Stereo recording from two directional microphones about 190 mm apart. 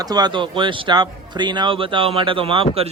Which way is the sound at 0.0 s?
20° right (ahead or behind).